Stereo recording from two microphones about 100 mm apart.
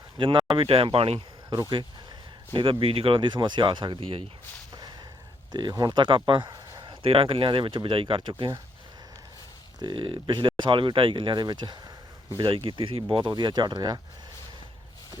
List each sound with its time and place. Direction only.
0.2 s speech: 60° right (ahead or behind); by 1.2 s 80° right
2.5 s speech: 60° right (ahead or behind)
5.5 s speech: 50° right (ahead or behind)
6.5 s a sound: 45° right (ahead or behind)
7.0 s speech: 65° right (ahead or behind)
9.8 s speech: 55° right (ahead or behind)
12.5 s speech: 65° right (ahead or behind)